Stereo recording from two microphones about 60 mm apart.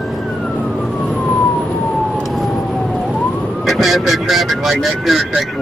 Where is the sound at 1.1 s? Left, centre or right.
Left.